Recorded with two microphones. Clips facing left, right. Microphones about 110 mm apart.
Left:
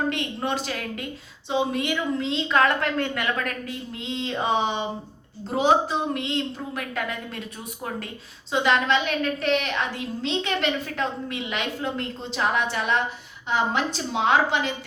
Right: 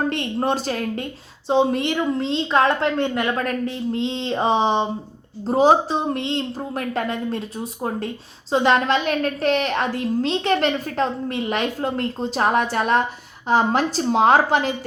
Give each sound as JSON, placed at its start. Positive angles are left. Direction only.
{"t": 0.1, "sound": "a woman's voice", "side_deg": -40}
{"t": 2.6, "sound": "a woman's voice", "side_deg": -25}